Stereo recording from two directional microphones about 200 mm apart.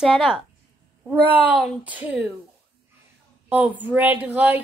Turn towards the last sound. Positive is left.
turn(degrees=-10)  # may be behind; listen again after turning